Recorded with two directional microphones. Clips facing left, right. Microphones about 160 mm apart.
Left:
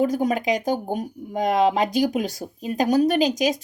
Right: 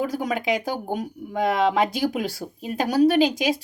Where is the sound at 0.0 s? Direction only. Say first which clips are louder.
Left 4 dB; 50° left (ahead or behind).